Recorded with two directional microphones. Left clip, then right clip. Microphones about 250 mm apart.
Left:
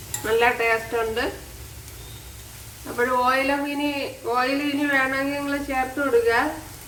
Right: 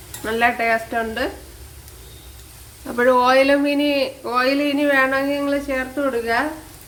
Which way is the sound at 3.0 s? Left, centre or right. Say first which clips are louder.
Right 6 dB; right.